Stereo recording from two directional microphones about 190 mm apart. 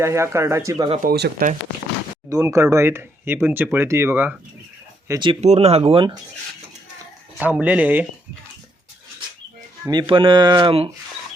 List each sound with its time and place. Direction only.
0.0 s speech: 15° right (ahead or behind)
1.0 s speech: 55° right (ahead or behind)
2.3 s speech: 15° right (ahead or behind)
5.3 s speech: 35° right (ahead or behind)
7.3 s speech: 5° right (ahead or behind)
9.8 s speech: 20° right (ahead or behind)